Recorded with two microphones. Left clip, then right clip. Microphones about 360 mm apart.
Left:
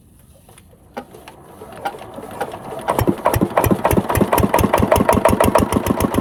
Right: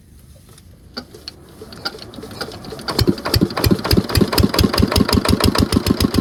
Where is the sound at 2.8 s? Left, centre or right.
Centre.